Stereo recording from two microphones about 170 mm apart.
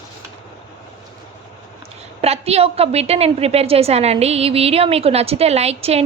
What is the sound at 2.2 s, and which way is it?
A woman's voice, 35° right (ahead or behind).